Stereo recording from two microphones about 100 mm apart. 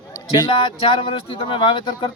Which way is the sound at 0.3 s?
50° left (ahead or behind).